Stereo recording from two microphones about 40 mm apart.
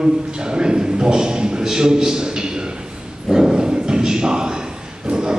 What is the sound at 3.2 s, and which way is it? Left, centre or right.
Dog, centre.